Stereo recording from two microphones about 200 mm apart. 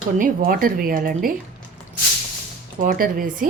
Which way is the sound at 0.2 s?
45° right (ahead or behind).